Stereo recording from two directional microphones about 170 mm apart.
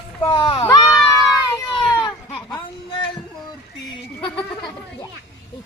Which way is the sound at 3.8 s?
30° left (ahead or behind).